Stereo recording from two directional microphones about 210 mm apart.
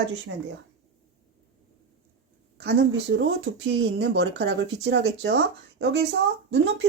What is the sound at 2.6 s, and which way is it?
Speech, 55° right (ahead or behind).